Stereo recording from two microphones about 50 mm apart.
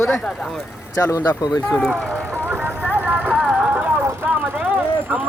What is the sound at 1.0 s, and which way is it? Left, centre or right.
Speech, left.